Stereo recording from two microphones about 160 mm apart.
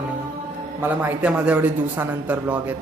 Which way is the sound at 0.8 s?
10° right (ahead or behind).